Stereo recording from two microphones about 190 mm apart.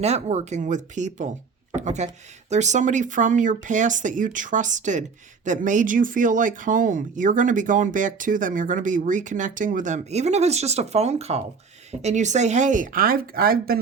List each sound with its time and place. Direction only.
0.0 s speech: 35° right (ahead or behind); by 13.7 s 50° right (ahead or behind)